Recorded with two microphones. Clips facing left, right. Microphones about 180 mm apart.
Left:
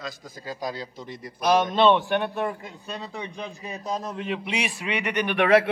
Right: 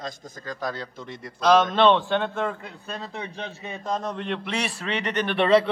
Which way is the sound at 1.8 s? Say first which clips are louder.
Even; 15° left (ahead or behind).